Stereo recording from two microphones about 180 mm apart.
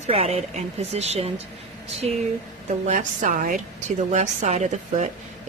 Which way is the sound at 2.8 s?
45° right (ahead or behind).